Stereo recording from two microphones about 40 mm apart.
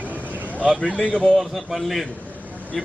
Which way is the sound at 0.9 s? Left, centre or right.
Right.